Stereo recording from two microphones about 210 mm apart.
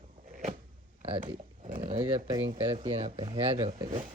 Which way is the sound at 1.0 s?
25° right (ahead or behind).